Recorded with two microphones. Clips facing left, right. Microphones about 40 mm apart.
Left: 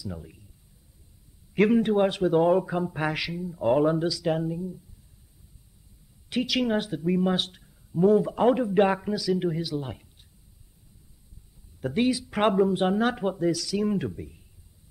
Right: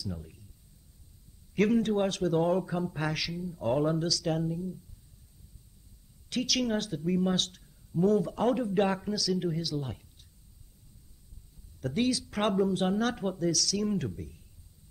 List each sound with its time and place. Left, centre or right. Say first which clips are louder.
0.0 s speech: left 2 dB; centre
1.5 s speech: left 5 dB; centre
6.3 s speech: left 4 dB; left
11.8 s speech: left 4 dB; left